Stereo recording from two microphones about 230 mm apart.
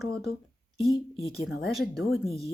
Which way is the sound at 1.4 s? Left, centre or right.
Left.